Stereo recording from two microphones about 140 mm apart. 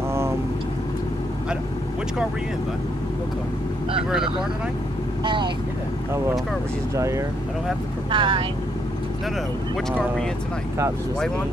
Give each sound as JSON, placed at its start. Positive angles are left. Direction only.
{"t": 4.1, "sound": "speech", "side_deg": -5}
{"t": 5.2, "sound": "speech", "side_deg": -35}
{"t": 7.0, "sound": "speech", "side_deg": -20}
{"t": 8.1, "sound": "speech", "side_deg": -35}